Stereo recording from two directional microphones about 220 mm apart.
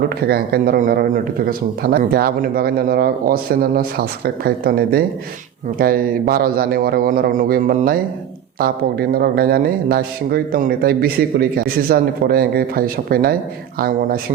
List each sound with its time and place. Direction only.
0.0 s speech: 45° right (ahead or behind)